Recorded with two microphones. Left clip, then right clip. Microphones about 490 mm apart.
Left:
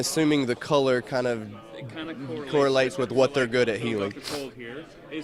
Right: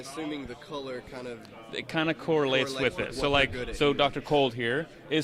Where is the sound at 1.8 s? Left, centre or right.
Right.